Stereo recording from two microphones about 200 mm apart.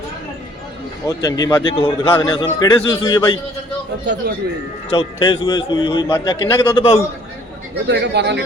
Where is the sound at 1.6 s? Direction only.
25° left (ahead or behind).